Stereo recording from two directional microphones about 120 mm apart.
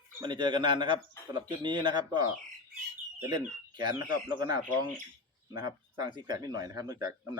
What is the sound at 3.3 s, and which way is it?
Speech, 40° right (ahead or behind).